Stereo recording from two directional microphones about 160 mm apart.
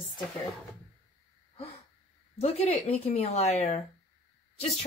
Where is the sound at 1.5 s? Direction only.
40° left (ahead or behind).